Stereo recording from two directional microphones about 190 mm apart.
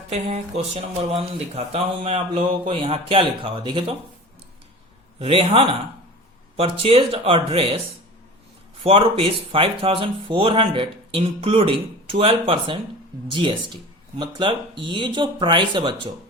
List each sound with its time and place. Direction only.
0.1 s speech: 35° right (ahead or behind)
5.2 s speech: 30° right (ahead or behind)
8.8 s speech: 30° right (ahead or behind)